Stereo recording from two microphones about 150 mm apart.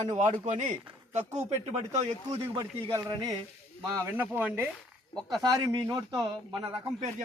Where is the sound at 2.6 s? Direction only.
25° right (ahead or behind).